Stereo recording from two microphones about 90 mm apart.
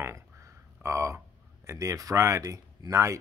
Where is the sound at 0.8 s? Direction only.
30° right (ahead or behind).